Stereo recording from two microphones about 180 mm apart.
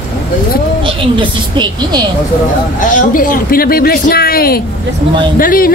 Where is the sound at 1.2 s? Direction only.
25° right (ahead or behind).